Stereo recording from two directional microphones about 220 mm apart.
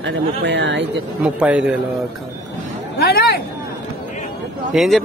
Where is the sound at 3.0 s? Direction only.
45° left (ahead or behind).